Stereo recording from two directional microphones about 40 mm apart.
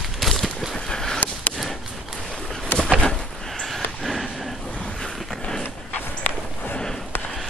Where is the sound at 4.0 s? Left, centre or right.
Centre.